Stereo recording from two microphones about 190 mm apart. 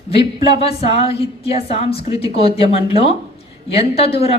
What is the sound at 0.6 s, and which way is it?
Speech, 30° left (ahead or behind).